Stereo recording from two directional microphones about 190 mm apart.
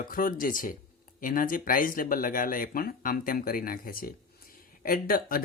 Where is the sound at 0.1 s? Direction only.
45° left (ahead or behind).